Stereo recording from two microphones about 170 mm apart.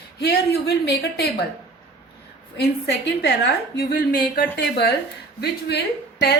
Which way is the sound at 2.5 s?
75° left (ahead or behind).